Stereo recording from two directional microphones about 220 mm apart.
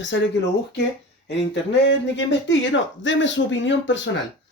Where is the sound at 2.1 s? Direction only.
55° left (ahead or behind).